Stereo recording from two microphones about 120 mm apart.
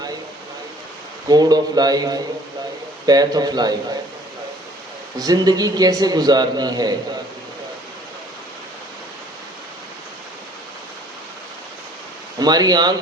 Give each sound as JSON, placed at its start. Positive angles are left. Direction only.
{"t": 1.3, "sound": "a man's voice", "side_deg": -35}
{"t": 5.1, "sound": "a man's voice", "side_deg": -30}
{"t": 12.4, "sound": "a man's voice", "side_deg": -35}